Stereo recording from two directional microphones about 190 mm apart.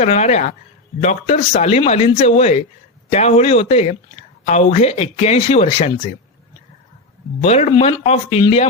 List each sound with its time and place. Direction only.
0.0 s speech: 35° left (ahead or behind)
7.4 s speech: 35° left (ahead or behind)